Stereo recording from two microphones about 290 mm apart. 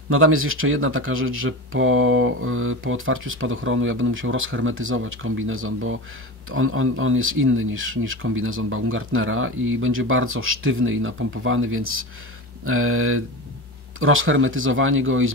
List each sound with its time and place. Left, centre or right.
0.1 s speech: right